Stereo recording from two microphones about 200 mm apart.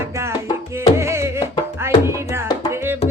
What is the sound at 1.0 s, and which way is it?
Music, 15° right (ahead or behind).